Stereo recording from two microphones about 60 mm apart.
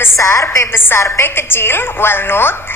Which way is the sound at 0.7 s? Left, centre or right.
Left.